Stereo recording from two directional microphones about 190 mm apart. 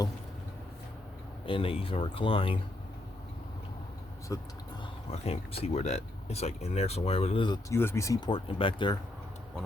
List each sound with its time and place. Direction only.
1.5 s speech: 30° left (ahead or behind)
4.3 s speech: 15° left (ahead or behind)
5.1 s speech: 35° left (ahead or behind)